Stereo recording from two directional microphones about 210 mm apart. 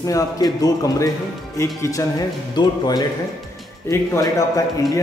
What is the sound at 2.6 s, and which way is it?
Speech, 20° left (ahead or behind).